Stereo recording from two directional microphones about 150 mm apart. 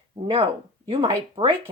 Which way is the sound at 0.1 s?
35° right (ahead or behind).